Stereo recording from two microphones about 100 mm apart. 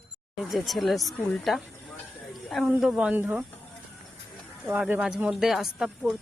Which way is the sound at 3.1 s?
15° right (ahead or behind).